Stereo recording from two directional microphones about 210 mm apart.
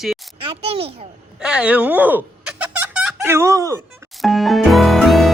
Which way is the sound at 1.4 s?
5° right (ahead or behind).